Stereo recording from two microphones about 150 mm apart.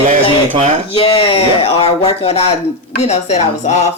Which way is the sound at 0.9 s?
40° left (ahead or behind).